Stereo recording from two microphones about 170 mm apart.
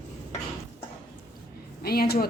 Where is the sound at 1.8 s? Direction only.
65° left (ahead or behind).